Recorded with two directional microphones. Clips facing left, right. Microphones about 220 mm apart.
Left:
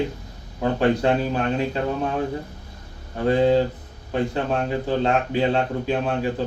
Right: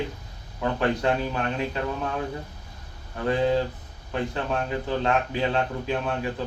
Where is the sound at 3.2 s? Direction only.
30° left (ahead or behind).